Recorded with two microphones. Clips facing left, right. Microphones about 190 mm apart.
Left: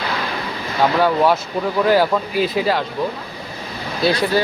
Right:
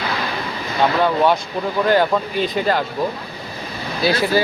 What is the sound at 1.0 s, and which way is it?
Speech, centre (ahead or behind).